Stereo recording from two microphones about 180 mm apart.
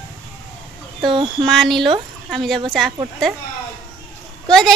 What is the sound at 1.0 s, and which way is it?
Speech, 25° right (ahead or behind).